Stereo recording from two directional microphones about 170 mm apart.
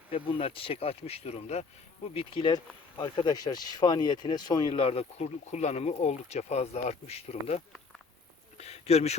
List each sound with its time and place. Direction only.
0.1 s speech: 35° left (ahead or behind)